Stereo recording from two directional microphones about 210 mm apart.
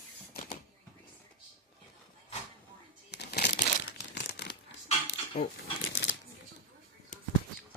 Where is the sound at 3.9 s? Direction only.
55° left (ahead or behind).